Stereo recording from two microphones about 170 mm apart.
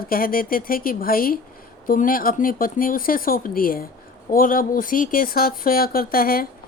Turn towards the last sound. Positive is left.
turn(degrees=60)  # may be behind; listen again after turning